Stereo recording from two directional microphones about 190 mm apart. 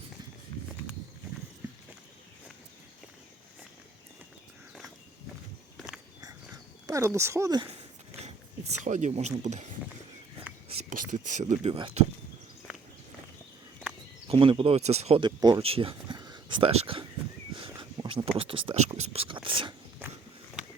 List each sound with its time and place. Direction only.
5.7 s walk: 5° right (ahead or behind)
6.8 s speech: 15° right (ahead or behind)
8.8 s speech: 40° right (ahead or behind)
10.8 s speech: 45° right (ahead or behind); by 12.0 s 30° right (ahead or behind)
14.3 s speech: 25° right (ahead or behind)
17.5 s a sound: 25° right (ahead or behind)
18.3 s speech: 30° right (ahead or behind)